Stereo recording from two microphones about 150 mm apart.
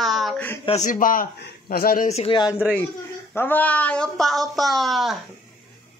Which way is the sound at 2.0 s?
45° left (ahead or behind).